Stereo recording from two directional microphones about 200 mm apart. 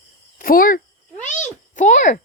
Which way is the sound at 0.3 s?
45° left (ahead or behind).